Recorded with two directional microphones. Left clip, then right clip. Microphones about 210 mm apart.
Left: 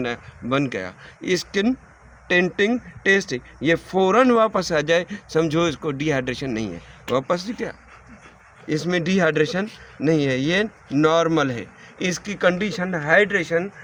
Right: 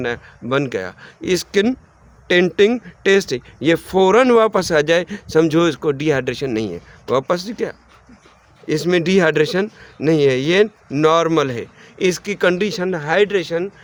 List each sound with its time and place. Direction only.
0.0 s speech: 50° right (ahead or behind)